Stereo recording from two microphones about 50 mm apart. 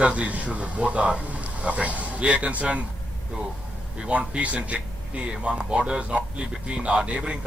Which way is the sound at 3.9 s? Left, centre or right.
Right.